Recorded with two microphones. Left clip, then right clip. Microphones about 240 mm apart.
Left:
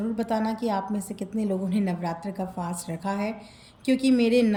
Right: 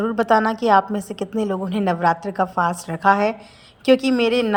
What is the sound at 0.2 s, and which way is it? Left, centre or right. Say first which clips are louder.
A woman's voice: right 11 dB; centre.